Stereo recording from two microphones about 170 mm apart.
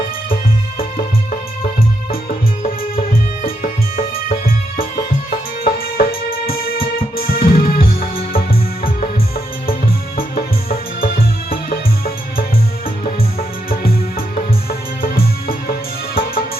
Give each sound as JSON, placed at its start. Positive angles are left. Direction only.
{"t": 0.8, "sound": "music", "side_deg": 60}
{"t": 2.9, "sound": "music", "side_deg": 60}
{"t": 10.2, "sound": "music", "side_deg": 60}
{"t": 13.7, "sound": "music", "side_deg": 60}